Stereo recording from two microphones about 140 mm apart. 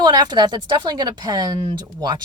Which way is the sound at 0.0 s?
30° right (ahead or behind).